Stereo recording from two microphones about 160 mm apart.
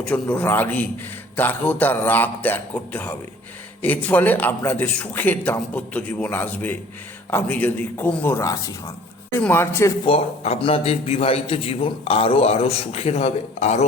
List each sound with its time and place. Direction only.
0.0 s a man's voice: 10° left (ahead or behind)
10.1 s a man's voice: 40° left (ahead or behind)